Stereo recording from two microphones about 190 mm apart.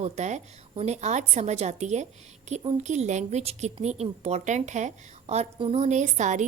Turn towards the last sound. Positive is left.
turn(degrees=-40)  # may be behind; listen again after turning